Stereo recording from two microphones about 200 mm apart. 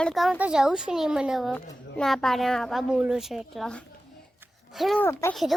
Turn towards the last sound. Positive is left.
turn(degrees=0)  # may be behind; listen again after turning